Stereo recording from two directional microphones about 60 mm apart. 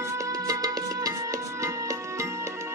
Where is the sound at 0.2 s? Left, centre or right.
Right.